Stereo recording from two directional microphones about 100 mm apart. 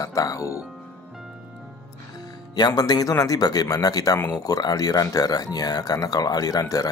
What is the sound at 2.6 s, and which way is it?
Speech, 40° left (ahead or behind).